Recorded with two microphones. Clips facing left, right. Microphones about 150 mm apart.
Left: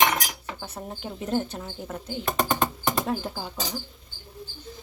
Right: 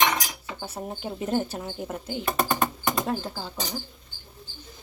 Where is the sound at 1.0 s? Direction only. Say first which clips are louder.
Right 1 dB; 5° right (ahead or behind).